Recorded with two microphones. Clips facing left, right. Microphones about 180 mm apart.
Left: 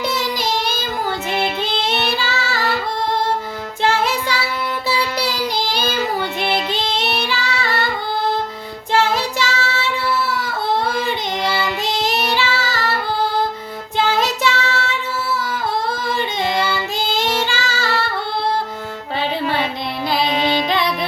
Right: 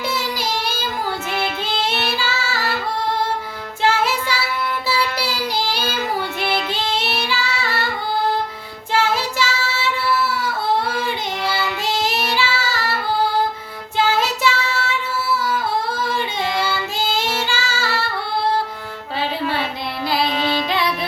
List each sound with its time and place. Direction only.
0.2 s child singing: 5° right (ahead or behind)
2.1 s child singing: 5° right (ahead or behind)
3.8 s music: 5° right (ahead or behind)
5.1 s child singing: 5° right (ahead or behind)
5.8 s child singing: 20° left (ahead or behind)
6.7 s child singing: 5° right (ahead or behind)
8.9 s child singing: 5° right (ahead or behind)
12.3 s child singing: 5° right (ahead or behind)
14.2 s child singing: 10° right (ahead or behind)
17.2 s child singing: 5° right (ahead or behind)
20.2 s music: 15° left (ahead or behind)